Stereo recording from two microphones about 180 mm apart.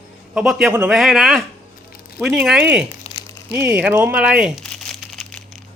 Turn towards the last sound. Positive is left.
turn(degrees=0)  # may be behind; listen again after turning